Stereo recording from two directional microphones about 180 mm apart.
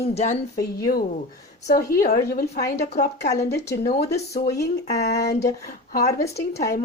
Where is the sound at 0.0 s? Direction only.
35° left (ahead or behind).